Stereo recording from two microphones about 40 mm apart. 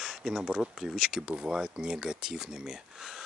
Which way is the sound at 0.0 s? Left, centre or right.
Centre.